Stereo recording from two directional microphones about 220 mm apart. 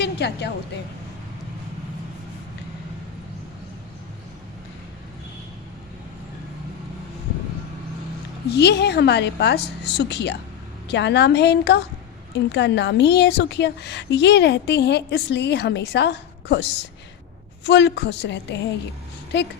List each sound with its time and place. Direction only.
0.0 s a woman's voice: 50° left (ahead or behind)
8.4 s a woman's voice: 50° left (ahead or behind)